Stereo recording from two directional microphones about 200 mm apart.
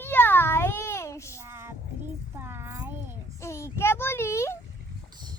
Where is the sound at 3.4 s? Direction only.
15° left (ahead or behind).